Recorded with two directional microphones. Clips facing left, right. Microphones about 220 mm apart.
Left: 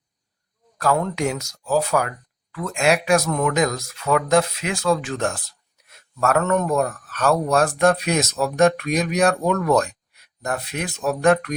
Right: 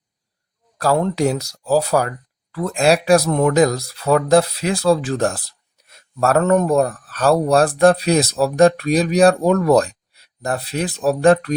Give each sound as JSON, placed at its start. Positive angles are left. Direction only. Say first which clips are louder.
{"t": 0.8, "sound": "a man's voice", "louder": "right 4 dB", "side_deg": -30}